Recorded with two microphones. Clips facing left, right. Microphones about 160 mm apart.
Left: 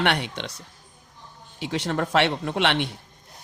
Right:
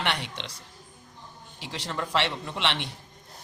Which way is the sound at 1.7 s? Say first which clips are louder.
Left 6 dB; 55° left (ahead or behind).